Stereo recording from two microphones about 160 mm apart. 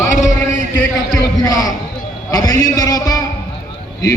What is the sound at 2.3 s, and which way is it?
Speech, 25° left (ahead or behind).